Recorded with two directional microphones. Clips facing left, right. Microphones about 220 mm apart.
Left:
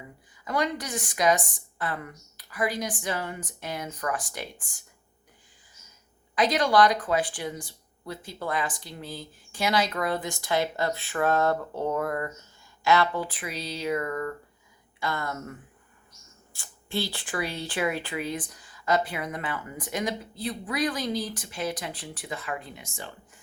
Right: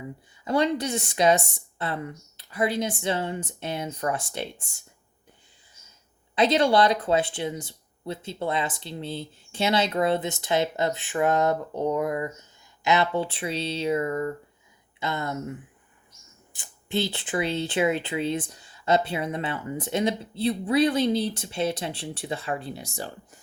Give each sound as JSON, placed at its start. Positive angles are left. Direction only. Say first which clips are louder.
{"t": 0.4, "sound": "speech", "louder": "right 5 dB", "side_deg": -25}
{"t": 6.3, "sound": "speech", "louder": "right 2 dB", "side_deg": -25}